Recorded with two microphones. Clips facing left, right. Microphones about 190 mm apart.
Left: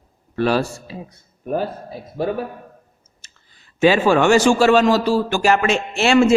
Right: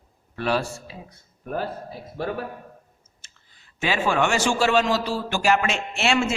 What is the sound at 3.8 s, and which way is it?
Speech, 35° left (ahead or behind).